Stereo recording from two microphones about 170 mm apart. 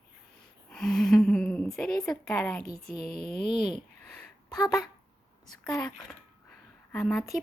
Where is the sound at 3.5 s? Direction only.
30° left (ahead or behind).